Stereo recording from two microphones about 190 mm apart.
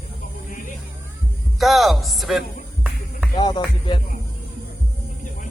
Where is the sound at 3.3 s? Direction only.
20° left (ahead or behind).